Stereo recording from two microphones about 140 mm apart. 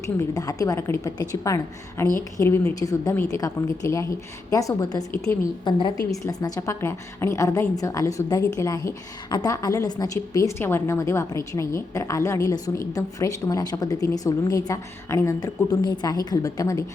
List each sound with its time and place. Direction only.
0.2 s a woman's voice: 25° left (ahead or behind)